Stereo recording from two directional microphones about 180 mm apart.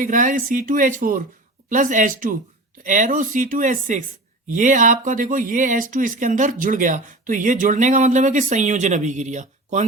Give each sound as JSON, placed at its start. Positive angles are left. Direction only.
{"t": 0.0, "sound": "speech", "side_deg": -45}